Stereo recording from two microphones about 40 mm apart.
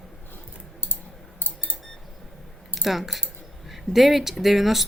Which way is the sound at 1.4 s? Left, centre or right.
Left.